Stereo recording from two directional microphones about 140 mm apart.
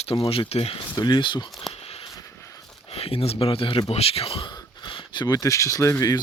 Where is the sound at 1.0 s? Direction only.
35° left (ahead or behind).